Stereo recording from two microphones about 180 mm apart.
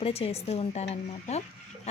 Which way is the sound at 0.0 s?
35° left (ahead or behind).